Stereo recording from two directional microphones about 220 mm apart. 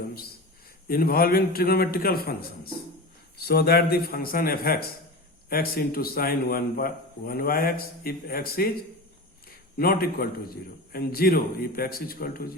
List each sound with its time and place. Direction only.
0.9 s a man's voice: 40° left (ahead or behind)
9.7 s a man's voice: 45° left (ahead or behind)